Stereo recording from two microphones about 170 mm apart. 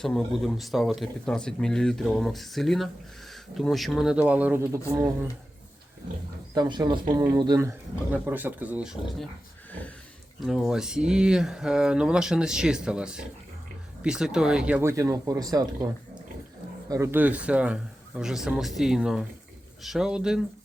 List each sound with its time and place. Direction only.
0.0 s speech: 5° left (ahead or behind); by 5.3 s 15° right (ahead or behind)
6.5 s speech: 25° right (ahead or behind)
8.1 s speech: 10° right (ahead or behind)
10.4 s speech: centre (ahead or behind); by 15.9 s 20° right (ahead or behind)
16.9 s speech: 15° right (ahead or behind)